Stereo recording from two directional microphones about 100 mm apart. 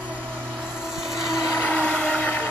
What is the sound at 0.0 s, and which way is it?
Vehicle, 15° right (ahead or behind).